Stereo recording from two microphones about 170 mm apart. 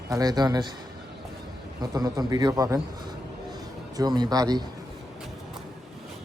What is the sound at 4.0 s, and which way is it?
Speech, 25° right (ahead or behind).